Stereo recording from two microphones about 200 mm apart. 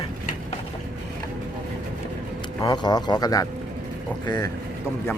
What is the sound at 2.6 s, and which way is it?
Speech, 20° left (ahead or behind).